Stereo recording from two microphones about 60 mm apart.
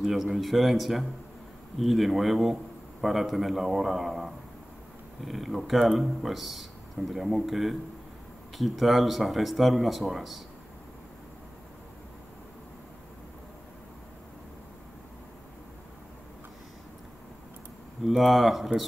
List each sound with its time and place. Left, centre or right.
0.0 s a man's voice: centre
18.0 s a man's voice: centre